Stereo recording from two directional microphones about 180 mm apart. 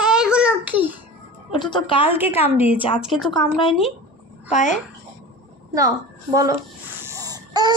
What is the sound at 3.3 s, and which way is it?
Speech, 25° left (ahead or behind).